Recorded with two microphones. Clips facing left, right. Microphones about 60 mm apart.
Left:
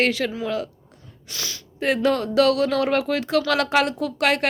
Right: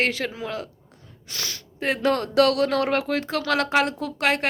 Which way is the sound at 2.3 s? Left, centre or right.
Right.